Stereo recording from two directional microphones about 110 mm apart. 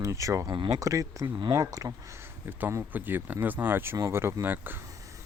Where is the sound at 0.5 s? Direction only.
45° right (ahead or behind).